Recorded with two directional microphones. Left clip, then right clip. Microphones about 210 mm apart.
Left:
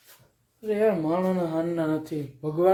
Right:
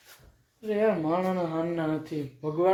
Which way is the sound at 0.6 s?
15° left (ahead or behind).